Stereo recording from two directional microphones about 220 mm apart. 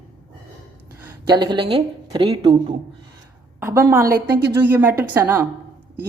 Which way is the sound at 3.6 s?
10° right (ahead or behind).